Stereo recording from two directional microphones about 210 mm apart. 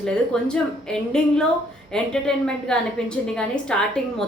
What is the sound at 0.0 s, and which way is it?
Speech, 5° left (ahead or behind).